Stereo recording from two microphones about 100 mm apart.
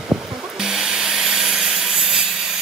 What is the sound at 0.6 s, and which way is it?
Wood, 5° right (ahead or behind).